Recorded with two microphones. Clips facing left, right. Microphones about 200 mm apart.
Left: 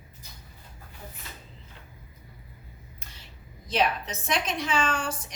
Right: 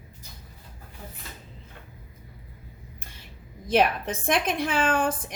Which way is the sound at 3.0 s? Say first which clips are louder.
Right 3 dB; 55° right (ahead or behind).